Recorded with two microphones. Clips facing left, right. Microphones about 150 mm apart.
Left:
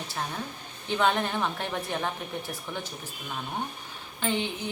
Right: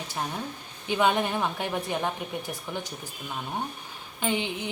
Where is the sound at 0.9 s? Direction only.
15° right (ahead or behind).